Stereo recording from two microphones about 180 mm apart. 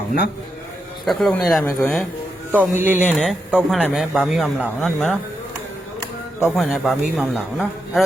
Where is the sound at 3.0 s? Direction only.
Centre (ahead or behind).